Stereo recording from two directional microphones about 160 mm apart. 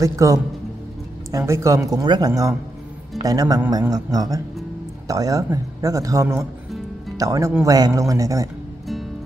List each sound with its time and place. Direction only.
0.0 s speech: 20° right (ahead or behind)